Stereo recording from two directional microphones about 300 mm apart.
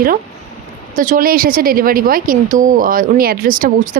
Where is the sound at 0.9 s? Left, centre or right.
Right.